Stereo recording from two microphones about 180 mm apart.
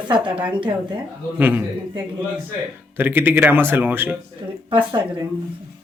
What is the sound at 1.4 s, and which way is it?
Speech, 10° right (ahead or behind).